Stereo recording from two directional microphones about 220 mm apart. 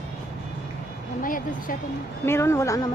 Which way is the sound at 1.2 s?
40° left (ahead or behind).